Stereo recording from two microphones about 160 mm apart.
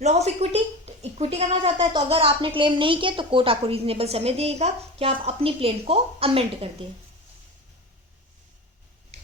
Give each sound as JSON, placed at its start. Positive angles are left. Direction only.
{"t": 0.0, "sound": "a woman's voice", "side_deg": -45}